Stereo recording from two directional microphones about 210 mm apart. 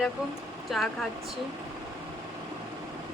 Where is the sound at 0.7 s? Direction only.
Centre (ahead or behind).